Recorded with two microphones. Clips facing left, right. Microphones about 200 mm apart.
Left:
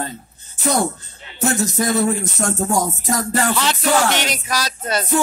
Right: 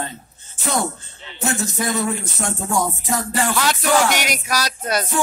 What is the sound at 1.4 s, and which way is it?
Music, 40° left (ahead or behind).